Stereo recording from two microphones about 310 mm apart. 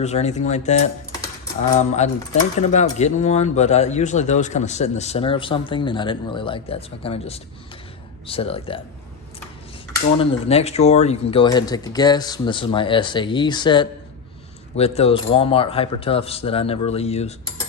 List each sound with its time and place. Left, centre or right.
0.0 s speech: left
10.2 s speech: centre